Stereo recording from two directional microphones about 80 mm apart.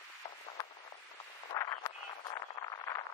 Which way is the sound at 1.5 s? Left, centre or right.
Left.